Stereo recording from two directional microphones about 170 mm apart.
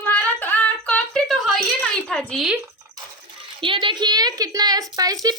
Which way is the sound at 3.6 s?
30° right (ahead or behind).